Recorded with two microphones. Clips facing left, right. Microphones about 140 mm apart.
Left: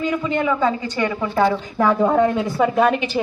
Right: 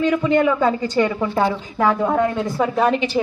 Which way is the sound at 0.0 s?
65° right (ahead or behind).